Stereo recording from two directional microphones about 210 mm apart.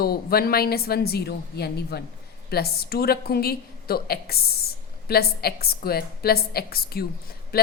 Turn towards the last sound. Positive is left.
turn(degrees=45)  # may be behind; listen again after turning